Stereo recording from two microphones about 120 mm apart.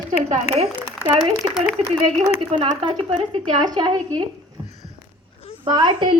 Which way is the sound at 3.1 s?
75° right (ahead or behind).